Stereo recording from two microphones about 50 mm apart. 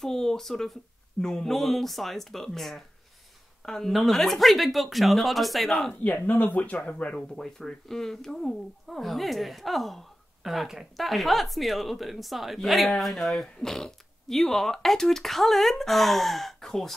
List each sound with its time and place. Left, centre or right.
0.0 s speech: centre
6.0 s speech: left
7.2 s a woman's voice: centre